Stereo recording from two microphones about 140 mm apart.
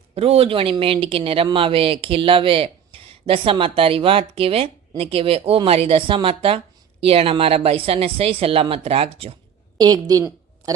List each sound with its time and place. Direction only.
0.1 s speech: 45° right (ahead or behind)
9.7 s a woman's voice: 25° right (ahead or behind)